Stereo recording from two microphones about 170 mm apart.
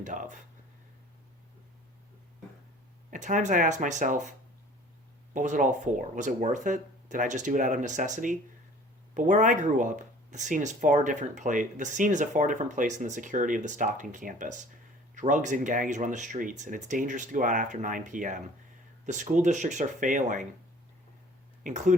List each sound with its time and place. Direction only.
0.0 s speech: 50° right (ahead or behind)
3.1 s speech: 50° right (ahead or behind)
21.6 s speech: 45° right (ahead or behind)